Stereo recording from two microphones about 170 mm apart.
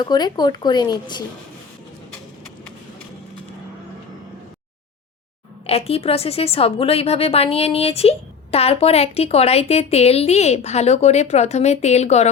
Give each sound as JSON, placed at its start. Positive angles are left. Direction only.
{"t": 0.0, "sound": "speech", "side_deg": 25}
{"t": 5.6, "sound": "a woman's voice", "side_deg": 35}